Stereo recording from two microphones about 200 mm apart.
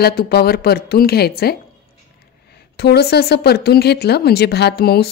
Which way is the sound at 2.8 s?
55° left (ahead or behind).